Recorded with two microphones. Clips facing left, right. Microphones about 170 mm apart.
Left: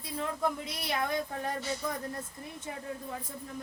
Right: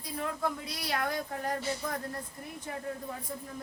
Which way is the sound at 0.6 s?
20° left (ahead or behind).